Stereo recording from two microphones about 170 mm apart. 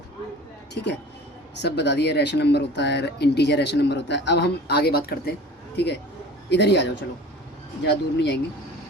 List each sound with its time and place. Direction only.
0.7 s speech: 80° left; by 5.3 s 65° left (ahead or behind)
5.7 s speech: 80° left
6.5 s a man's voice: 90° left